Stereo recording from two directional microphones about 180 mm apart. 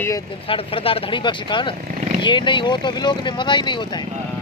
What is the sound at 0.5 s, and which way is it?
Speech, 30° left (ahead or behind).